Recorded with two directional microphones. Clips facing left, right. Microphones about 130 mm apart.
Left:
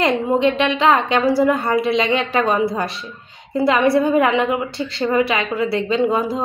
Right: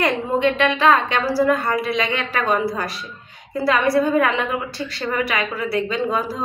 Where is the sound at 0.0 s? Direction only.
20° left (ahead or behind).